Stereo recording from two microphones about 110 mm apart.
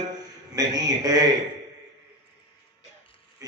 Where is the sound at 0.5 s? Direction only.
35° right (ahead or behind).